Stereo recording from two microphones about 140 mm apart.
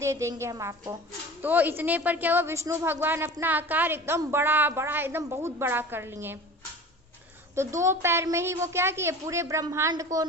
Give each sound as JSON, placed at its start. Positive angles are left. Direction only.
{"t": 0.0, "sound": "a woman's voice", "side_deg": -20}
{"t": 7.5, "sound": "a woman's voice", "side_deg": -20}